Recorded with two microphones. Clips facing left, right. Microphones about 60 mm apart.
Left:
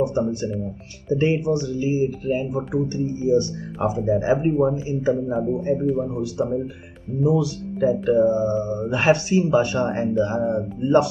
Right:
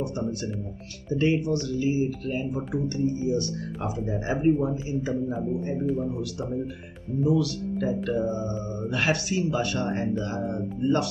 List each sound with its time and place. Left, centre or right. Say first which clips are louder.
0.0 s speech: left 8 dB; left